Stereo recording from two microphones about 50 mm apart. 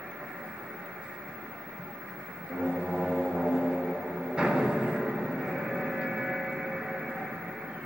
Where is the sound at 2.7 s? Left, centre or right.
Centre.